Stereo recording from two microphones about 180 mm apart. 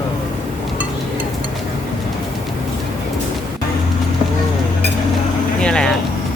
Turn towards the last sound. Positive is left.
turn(degrees=5)  # may be behind; listen again after turning